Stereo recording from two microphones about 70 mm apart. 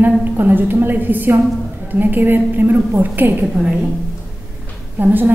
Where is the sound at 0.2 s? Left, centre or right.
Right.